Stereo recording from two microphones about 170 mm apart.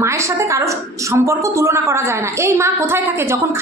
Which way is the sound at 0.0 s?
15° right (ahead or behind).